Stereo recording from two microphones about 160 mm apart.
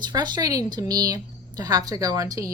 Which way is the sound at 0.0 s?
25° right (ahead or behind).